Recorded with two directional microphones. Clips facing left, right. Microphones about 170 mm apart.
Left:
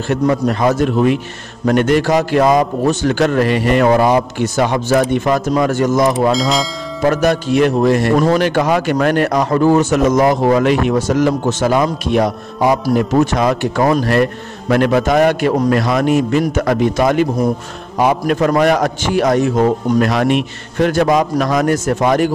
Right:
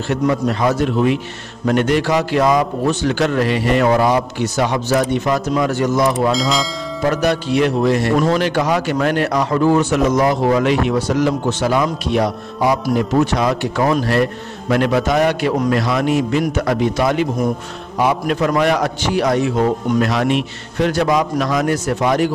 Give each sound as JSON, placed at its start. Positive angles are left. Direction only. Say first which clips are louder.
{"t": 0.1, "sound": "a man's voice", "louder": "left 2 dB", "side_deg": 50}
{"t": 6.3, "sound": "speech", "louder": "left 2 dB", "side_deg": 0}
{"t": 7.1, "sound": "a man's voice", "louder": "left 3 dB", "side_deg": 45}